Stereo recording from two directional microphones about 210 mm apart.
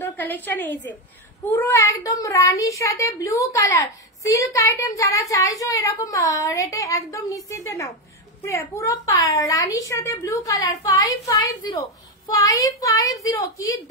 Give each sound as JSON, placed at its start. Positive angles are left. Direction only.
{"t": 0.0, "sound": "a child's voice", "side_deg": 10}